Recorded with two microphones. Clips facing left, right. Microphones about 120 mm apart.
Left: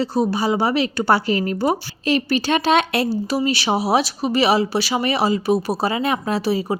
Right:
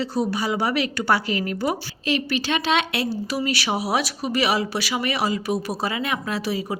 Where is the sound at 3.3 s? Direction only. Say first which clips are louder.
Left 5 dB; 30° left (ahead or behind).